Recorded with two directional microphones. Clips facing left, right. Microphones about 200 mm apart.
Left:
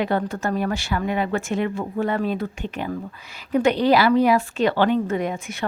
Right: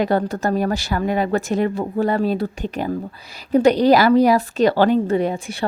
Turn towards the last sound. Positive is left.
turn(degrees=-35)  # may be behind; listen again after turning